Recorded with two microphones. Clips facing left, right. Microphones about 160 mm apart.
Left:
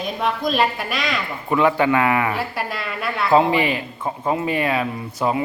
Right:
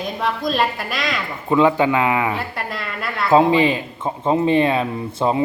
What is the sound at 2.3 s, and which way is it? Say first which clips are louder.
A woman's voice: left 1 dB; centre (ahead or behind).